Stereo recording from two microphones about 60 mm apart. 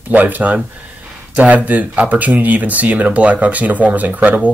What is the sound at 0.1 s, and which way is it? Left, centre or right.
Speech, right.